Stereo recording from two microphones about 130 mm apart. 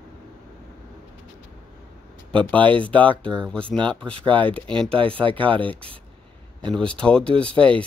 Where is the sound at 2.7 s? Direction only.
40° right (ahead or behind).